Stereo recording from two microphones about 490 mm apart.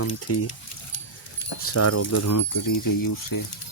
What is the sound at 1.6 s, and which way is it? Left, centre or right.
Speech, left.